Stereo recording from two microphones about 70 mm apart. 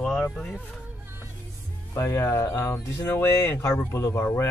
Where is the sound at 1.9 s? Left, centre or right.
Left.